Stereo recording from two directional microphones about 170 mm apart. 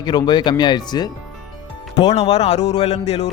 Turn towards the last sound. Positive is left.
turn(degrees=40)  # may be behind; listen again after turning